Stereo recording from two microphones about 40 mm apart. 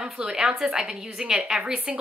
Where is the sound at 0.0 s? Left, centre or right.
Centre.